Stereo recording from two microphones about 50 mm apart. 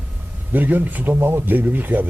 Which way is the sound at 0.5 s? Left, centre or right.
Right.